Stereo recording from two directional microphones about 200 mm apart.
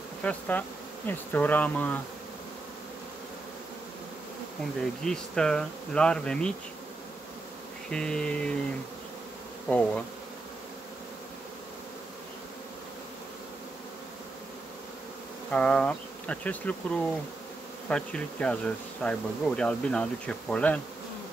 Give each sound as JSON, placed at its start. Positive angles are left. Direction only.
{"t": 0.2, "sound": "bee", "side_deg": 5}
{"t": 4.7, "sound": "speech", "side_deg": 5}
{"t": 7.9, "sound": "speech", "side_deg": 5}
{"t": 9.7, "sound": "bee", "side_deg": 5}
{"t": 15.5, "sound": "bee", "side_deg": 5}
{"t": 17.8, "sound": "speech", "side_deg": 5}